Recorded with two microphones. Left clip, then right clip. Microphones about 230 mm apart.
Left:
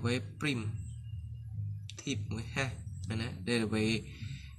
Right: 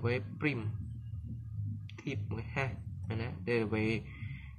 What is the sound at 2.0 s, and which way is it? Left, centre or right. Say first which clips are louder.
Speech: left 2 dB; right.